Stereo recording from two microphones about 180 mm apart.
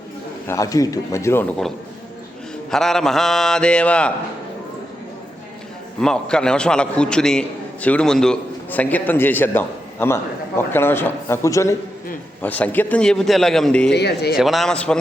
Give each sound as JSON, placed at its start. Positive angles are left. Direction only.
{"t": 0.4, "sound": "a man's voice", "side_deg": 15}
{"t": 2.6, "sound": "a man's voice", "side_deg": 0}
{"t": 6.0, "sound": "a man's voice", "side_deg": 5}
{"t": 13.9, "sound": "speech", "side_deg": 65}
{"t": 14.3, "sound": "a man's voice", "side_deg": 0}